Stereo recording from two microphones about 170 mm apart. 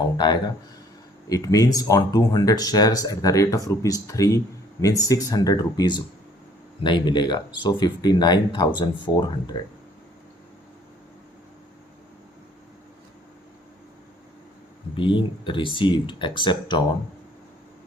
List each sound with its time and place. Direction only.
0.0 s speech: 25° left (ahead or behind)
14.9 s speech: 30° left (ahead or behind)